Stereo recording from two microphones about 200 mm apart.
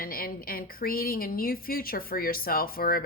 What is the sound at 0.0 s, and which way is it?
Speech, 45° left (ahead or behind).